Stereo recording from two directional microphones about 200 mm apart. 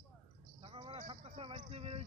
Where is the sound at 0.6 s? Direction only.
25° right (ahead or behind).